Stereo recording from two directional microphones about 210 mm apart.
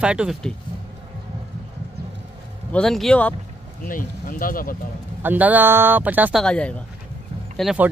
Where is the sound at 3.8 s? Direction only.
40° left (ahead or behind).